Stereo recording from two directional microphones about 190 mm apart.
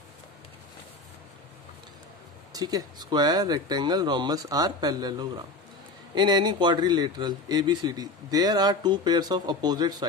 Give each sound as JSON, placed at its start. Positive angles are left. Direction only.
{"t": 2.5, "sound": "speech", "side_deg": -20}